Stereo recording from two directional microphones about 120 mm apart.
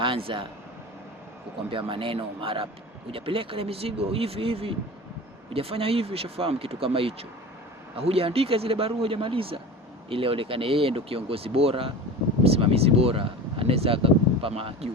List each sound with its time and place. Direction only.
0.0 s speech: 45° right (ahead or behind)
1.7 s speech: 45° right (ahead or behind)